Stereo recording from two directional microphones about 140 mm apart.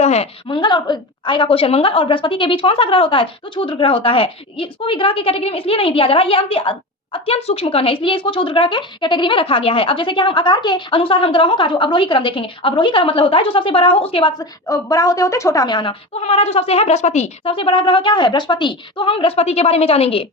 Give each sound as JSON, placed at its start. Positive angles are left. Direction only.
{"t": 0.0, "sound": "a woman's voice", "side_deg": 50}
{"t": 0.4, "sound": "a woman's voice", "side_deg": 35}
{"t": 14.7, "sound": "a woman's voice", "side_deg": 25}